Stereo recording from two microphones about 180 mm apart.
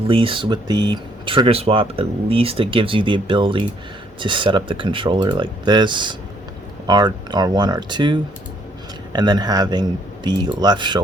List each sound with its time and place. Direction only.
0.1 s speech: 30° right (ahead or behind)